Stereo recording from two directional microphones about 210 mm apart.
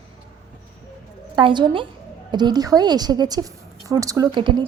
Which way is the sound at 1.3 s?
20° right (ahead or behind).